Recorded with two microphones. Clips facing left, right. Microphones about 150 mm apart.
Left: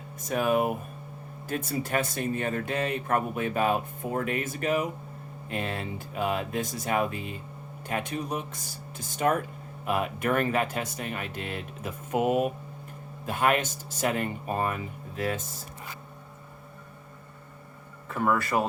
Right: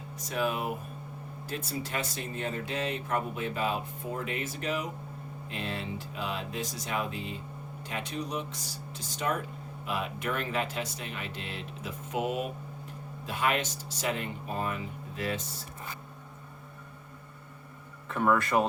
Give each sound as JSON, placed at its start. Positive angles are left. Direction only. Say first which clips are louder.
{"t": 0.2, "sound": "speech", "louder": "left 6 dB", "side_deg": 50}
{"t": 18.1, "sound": "speech", "louder": "even", "side_deg": 0}